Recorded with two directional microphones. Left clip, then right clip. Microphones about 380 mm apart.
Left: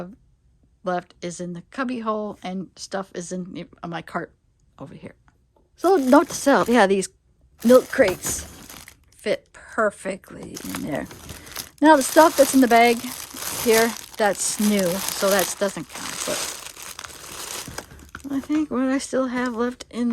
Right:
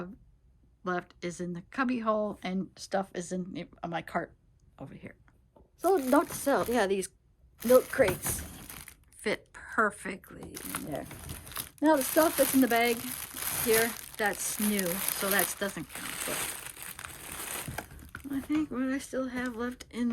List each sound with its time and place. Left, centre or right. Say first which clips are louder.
0.9 s speech: left 8 dB; centre
5.7 s speech: left 9 dB; left
17.7 s speech: left 5 dB; centre